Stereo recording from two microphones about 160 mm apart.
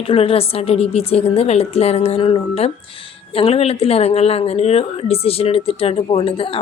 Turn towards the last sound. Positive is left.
turn(degrees=35)  # may be behind; listen again after turning